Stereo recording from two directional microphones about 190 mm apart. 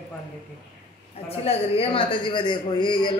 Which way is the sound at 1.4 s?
30° left (ahead or behind).